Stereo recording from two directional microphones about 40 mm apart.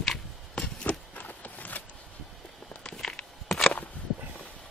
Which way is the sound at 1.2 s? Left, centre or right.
Left.